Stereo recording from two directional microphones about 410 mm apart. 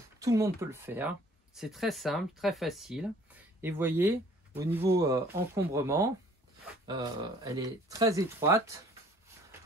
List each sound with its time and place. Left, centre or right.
0.2 s speech: centre
7.4 s speech: centre